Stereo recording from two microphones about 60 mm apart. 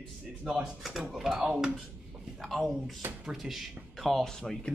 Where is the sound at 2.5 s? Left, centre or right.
Centre.